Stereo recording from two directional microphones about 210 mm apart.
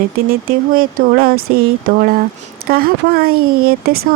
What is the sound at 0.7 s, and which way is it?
Speech, 45° right (ahead or behind).